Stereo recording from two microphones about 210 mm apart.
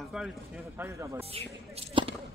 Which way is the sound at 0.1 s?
5° right (ahead or behind).